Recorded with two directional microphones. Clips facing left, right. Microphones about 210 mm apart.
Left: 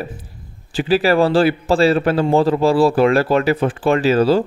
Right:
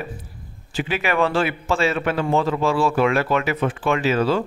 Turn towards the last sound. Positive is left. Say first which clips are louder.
# left 6 dB
turn(degrees=35)  # may be behind; listen again after turning